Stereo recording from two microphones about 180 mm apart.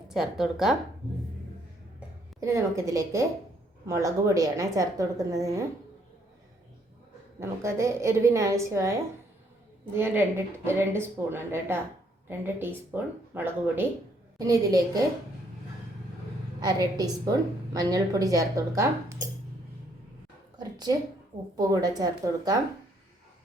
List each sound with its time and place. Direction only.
0.1 s speech: centre (ahead or behind)
2.4 s speech: 15° right (ahead or behind)
7.3 s speech: 15° right (ahead or behind)
16.6 s speech: 20° right (ahead or behind)
20.6 s a woman's voice: 20° right (ahead or behind)